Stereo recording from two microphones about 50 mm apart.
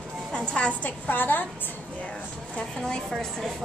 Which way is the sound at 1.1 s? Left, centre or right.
Left.